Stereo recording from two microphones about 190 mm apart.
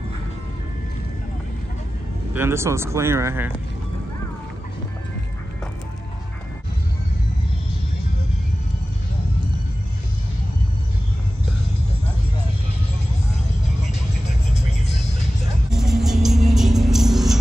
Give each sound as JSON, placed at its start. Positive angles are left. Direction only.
{"t": 2.3, "sound": "speech", "side_deg": -15}
{"t": 14.5, "sound": "music", "side_deg": 35}
{"t": 15.7, "sound": "music", "side_deg": 0}